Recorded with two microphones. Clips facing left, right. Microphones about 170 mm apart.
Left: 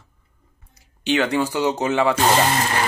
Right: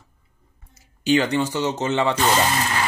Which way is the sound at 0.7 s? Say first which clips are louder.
Right 2 dB; centre (ahead or behind).